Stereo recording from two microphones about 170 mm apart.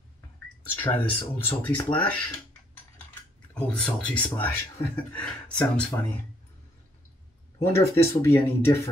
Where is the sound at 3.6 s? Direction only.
5° left (ahead or behind).